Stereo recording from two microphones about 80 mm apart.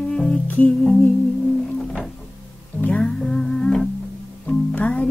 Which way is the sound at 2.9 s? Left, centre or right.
Centre.